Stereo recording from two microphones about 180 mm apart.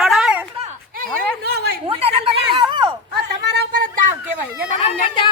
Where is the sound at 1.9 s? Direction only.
35° right (ahead or behind).